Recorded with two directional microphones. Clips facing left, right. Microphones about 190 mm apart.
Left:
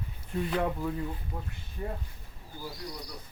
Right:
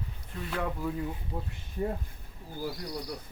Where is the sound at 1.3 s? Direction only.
20° right (ahead or behind).